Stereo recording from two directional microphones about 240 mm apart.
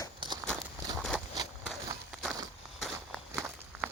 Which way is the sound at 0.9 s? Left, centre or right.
Centre.